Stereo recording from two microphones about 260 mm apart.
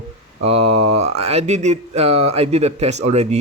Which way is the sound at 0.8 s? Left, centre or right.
Right.